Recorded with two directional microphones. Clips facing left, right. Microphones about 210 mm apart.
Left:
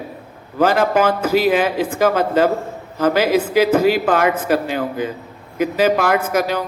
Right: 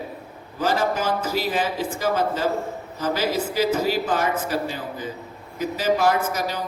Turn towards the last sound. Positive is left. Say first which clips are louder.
# left 7 dB
turn(degrees=60)  # may be behind; listen again after turning